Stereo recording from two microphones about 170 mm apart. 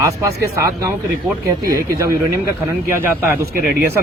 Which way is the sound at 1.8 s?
20° right (ahead or behind).